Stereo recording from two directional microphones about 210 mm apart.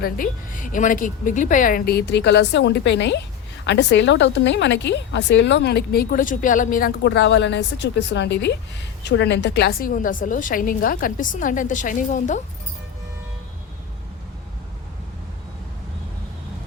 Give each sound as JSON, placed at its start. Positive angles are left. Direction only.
{"t": 0.0, "sound": "a woman's voice", "side_deg": 40}